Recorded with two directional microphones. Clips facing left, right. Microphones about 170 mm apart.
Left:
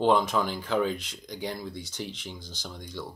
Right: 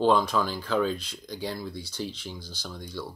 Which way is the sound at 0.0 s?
20° left (ahead or behind).